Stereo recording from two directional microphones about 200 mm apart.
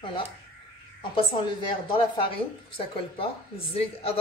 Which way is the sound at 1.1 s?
25° left (ahead or behind).